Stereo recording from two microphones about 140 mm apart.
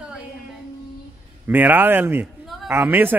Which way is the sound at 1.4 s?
15° right (ahead or behind).